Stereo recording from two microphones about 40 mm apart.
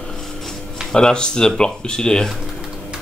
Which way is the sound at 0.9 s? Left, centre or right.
Left.